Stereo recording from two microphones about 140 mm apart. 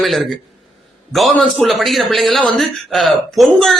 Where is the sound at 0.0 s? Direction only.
Centre (ahead or behind).